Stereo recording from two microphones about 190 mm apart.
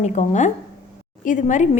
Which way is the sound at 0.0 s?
40° left (ahead or behind).